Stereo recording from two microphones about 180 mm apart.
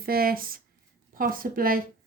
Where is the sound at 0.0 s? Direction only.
55° right (ahead or behind).